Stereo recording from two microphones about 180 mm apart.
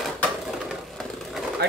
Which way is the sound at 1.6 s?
65° right (ahead or behind).